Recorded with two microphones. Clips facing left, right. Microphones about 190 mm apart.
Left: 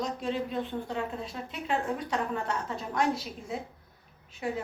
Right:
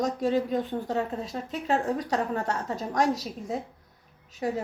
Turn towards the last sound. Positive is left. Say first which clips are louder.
# right 4 dB
turn(degrees=-40)  # may be behind; listen again after turning